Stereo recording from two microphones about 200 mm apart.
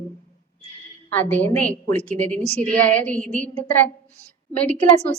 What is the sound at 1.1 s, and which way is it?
A woman's voice, 10° left (ahead or behind).